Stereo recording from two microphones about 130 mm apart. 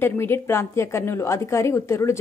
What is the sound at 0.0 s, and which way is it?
A woman's voice, 15° left (ahead or behind).